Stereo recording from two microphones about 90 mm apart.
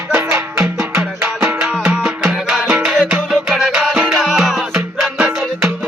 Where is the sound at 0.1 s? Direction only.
25° right (ahead or behind).